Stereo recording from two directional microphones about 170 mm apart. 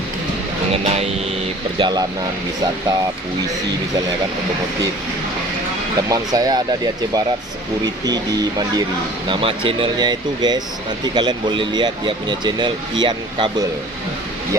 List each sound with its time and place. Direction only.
0.7 s speech: 35° right (ahead or behind)
1.8 s speech: 25° right (ahead or behind)
6.1 s speech: 20° right (ahead or behind)